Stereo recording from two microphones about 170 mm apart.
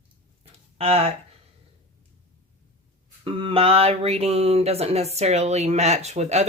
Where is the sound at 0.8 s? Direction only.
35° right (ahead or behind).